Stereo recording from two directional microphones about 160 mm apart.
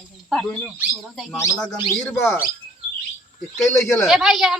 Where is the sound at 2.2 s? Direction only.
15° left (ahead or behind).